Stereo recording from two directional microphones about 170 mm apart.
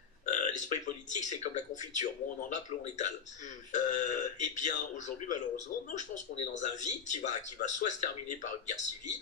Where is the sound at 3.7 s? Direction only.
45° left (ahead or behind).